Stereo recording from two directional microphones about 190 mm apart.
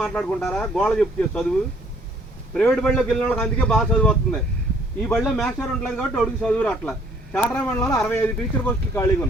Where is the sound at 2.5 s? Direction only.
5° left (ahead or behind).